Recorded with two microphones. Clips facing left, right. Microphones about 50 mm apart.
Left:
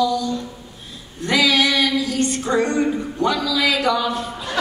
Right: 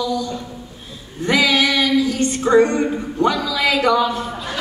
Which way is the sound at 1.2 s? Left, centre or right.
Centre.